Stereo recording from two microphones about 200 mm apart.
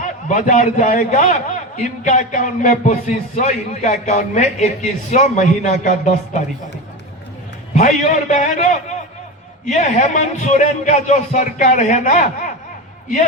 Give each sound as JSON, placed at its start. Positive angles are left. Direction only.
{"t": 0.0, "sound": "a man's voice", "side_deg": 40}
{"t": 7.8, "sound": "a man's voice", "side_deg": 40}